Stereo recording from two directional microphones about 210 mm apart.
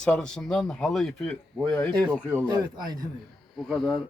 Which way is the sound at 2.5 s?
20° right (ahead or behind).